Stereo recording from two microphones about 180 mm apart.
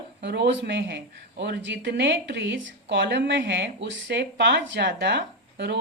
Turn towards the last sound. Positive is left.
turn(degrees=-70)  # may be behind; listen again after turning